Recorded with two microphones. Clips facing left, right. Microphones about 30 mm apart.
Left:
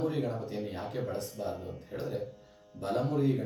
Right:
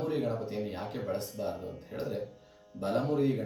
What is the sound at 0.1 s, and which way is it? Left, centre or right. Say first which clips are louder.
Speech: right 2 dB; centre.